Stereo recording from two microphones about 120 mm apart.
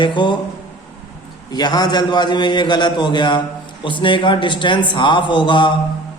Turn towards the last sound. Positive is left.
turn(degrees=40)  # may be behind; listen again after turning